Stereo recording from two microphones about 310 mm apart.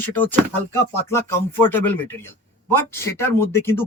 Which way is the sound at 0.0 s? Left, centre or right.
Centre.